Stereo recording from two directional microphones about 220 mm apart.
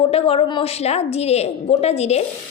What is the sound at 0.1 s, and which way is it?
A woman's voice, 25° left (ahead or behind).